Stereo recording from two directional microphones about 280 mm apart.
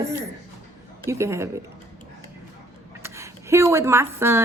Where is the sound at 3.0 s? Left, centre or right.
Centre.